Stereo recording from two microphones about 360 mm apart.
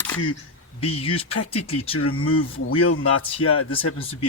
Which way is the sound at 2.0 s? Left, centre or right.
Left.